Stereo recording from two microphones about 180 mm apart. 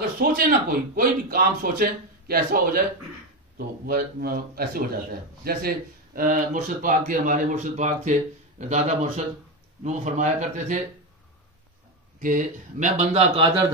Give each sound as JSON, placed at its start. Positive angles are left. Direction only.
{"t": 0.2, "sound": "a man's voice", "side_deg": -55}
{"t": 12.2, "sound": "speech", "side_deg": -45}